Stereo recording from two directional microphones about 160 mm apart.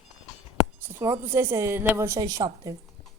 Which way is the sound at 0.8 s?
15° right (ahead or behind).